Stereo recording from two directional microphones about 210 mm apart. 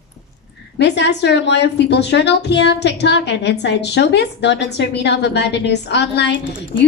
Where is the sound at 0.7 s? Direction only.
55° left (ahead or behind).